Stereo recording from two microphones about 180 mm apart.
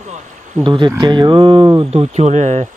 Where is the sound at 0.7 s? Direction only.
25° right (ahead or behind).